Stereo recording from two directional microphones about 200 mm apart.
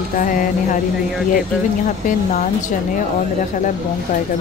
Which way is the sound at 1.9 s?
40° left (ahead or behind).